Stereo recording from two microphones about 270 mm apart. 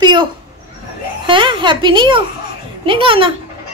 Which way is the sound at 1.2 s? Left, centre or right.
Centre.